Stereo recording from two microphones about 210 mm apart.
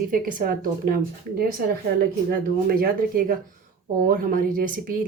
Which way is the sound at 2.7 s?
45° right (ahead or behind).